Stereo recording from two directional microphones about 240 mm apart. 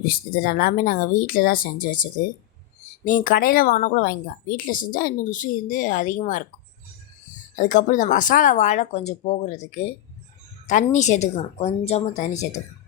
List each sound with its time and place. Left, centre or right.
0.1 s speech: left
7.6 s a woman's voice: left